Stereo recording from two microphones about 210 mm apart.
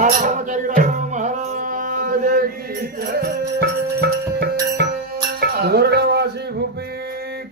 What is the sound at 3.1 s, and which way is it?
Music, 50° right (ahead or behind).